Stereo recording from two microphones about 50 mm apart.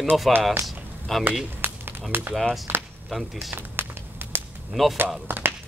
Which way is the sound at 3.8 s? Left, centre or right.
Right.